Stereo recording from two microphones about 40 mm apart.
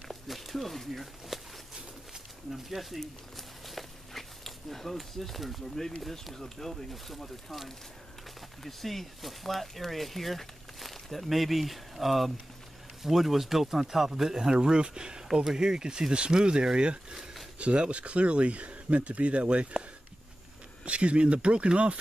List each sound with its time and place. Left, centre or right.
0.1 s speech: centre
2.5 s speech: centre; by 19.8 s right
20.8 s speech: right